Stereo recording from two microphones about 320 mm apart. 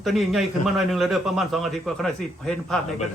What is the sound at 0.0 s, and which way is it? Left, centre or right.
A man's voice, centre.